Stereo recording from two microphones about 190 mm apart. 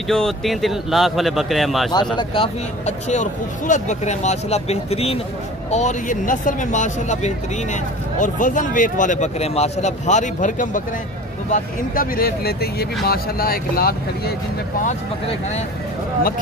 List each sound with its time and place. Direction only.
0.1 s speech: centre (ahead or behind)
2.1 s speech: 30° left (ahead or behind)
3.1 s speech: 40° left (ahead or behind)